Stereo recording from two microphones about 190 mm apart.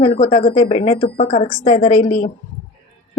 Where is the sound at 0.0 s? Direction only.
35° left (ahead or behind).